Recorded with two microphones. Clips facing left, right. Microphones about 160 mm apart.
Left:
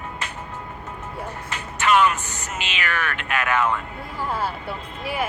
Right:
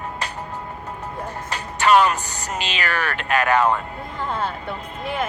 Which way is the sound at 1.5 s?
35° right (ahead or behind).